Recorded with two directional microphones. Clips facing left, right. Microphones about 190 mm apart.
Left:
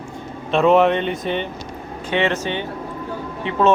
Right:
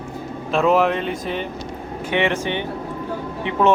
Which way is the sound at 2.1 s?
15° right (ahead or behind).